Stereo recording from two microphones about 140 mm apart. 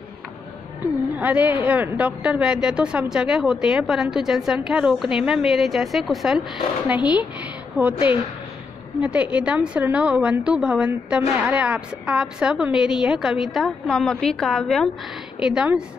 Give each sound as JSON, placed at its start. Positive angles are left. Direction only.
{"t": 1.1, "sound": "a woman's voice", "side_deg": -10}
{"t": 7.9, "sound": "a woman's voice", "side_deg": 40}
{"t": 9.0, "sound": "a woman's voice", "side_deg": -10}